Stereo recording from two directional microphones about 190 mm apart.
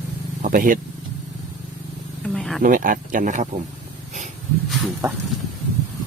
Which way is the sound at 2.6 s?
45° right (ahead or behind).